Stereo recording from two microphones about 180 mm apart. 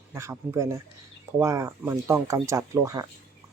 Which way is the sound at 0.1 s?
15° right (ahead or behind).